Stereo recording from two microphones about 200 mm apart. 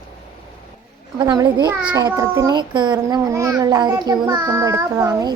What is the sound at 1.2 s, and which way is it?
A child's voice, 20° right (ahead or behind).